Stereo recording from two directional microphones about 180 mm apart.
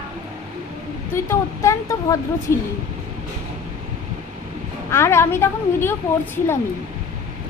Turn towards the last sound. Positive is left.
turn(degrees=15)  # may be behind; listen again after turning